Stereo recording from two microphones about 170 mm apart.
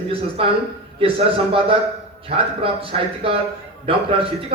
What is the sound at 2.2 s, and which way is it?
A man's voice, 35° right (ahead or behind).